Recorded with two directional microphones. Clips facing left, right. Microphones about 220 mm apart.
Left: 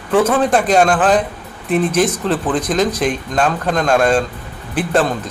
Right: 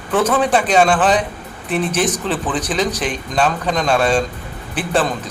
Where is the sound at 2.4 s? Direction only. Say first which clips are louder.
Left 4 dB; 10° left (ahead or behind).